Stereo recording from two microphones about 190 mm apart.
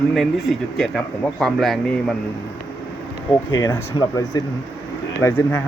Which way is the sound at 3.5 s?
15° left (ahead or behind).